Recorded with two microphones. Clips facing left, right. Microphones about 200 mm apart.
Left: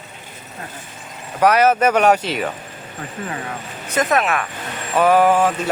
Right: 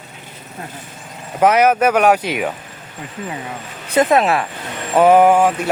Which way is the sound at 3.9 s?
30° right (ahead or behind).